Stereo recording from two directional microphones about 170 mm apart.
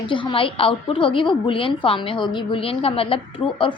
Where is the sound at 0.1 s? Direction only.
30° left (ahead or behind).